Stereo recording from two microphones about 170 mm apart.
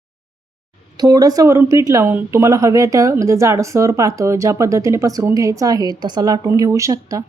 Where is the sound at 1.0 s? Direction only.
20° right (ahead or behind).